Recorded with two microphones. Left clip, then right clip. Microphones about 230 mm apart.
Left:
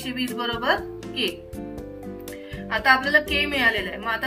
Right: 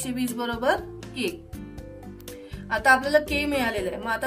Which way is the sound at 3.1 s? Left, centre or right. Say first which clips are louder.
Left 2 dB; right.